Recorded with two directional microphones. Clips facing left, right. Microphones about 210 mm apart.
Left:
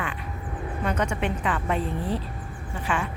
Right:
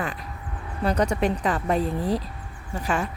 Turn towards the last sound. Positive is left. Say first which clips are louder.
# right 2 dB
turn(degrees=-40)  # may be behind; listen again after turning